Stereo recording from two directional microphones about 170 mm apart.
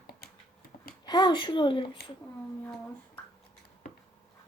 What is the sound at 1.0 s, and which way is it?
Speech, 25° left (ahead or behind).